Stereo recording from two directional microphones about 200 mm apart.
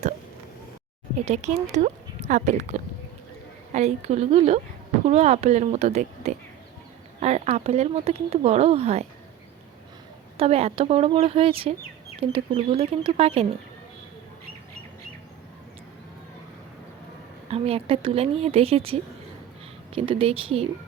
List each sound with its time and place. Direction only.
1.2 s speech: 35° right (ahead or behind)
10.3 s a woman's voice: 30° right (ahead or behind)
17.5 s a woman's voice: 30° right (ahead or behind)
20.0 s a woman's voice: 30° right (ahead or behind)